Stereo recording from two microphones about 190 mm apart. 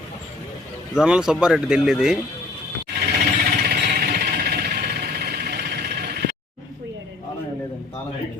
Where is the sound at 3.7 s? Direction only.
55° right (ahead or behind).